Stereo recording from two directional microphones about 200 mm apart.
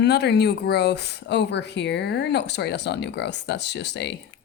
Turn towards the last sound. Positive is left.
turn(degrees=55)  # may be behind; listen again after turning